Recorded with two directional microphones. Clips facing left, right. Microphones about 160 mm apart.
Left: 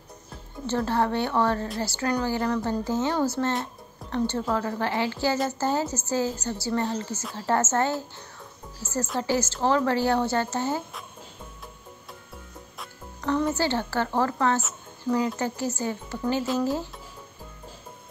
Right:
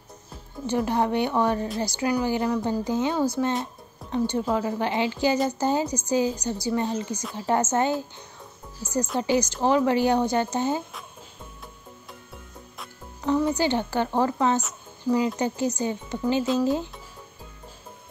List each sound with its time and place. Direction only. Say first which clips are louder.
0.7 s speech: right 1 dB; 15° right (ahead or behind)
13.2 s speech: right 2 dB; 10° right (ahead or behind)